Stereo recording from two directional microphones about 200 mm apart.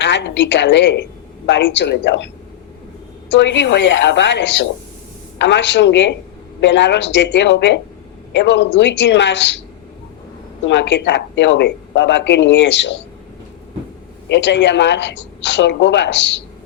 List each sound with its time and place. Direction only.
0.0 s a woman's voice: 60° left (ahead or behind)
10.7 s speech: 60° left (ahead or behind)
14.3 s speech: 60° left (ahead or behind)